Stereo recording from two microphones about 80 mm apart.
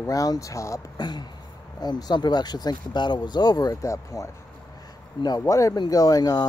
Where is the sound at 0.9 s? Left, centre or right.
Left.